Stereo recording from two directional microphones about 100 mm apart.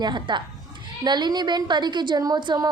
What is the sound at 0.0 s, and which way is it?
A woman's voice, 50° right (ahead or behind).